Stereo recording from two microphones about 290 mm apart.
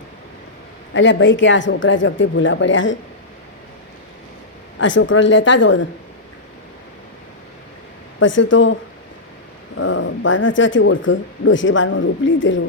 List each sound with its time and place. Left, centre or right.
0.9 s speech: left
4.8 s speech: left
8.2 s speech: left
9.7 s speech: left